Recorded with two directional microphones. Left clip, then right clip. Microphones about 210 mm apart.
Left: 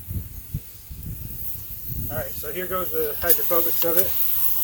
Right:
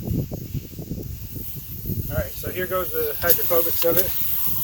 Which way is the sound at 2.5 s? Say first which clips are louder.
Right 2 dB; 60° left (ahead or behind).